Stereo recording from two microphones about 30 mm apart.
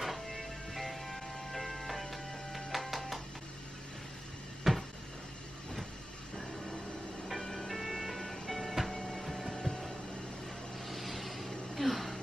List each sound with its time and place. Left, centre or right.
0.0 s music: centre
4.7 s a sound: centre
7.4 s music: centre
9.0 s printer: centre
9.6 s a sound: centre
10.9 s vehicle: centre